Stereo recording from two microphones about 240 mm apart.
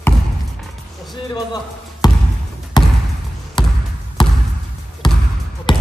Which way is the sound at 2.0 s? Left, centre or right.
Centre.